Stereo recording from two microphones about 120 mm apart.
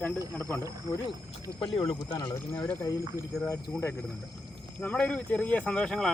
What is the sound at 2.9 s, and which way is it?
Speech, 25° right (ahead or behind).